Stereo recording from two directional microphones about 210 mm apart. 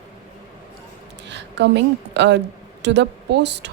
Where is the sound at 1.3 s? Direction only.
55° right (ahead or behind).